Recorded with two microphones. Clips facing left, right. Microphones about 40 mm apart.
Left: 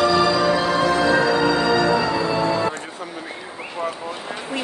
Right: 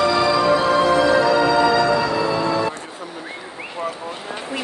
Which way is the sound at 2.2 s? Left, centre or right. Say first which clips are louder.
Even; centre.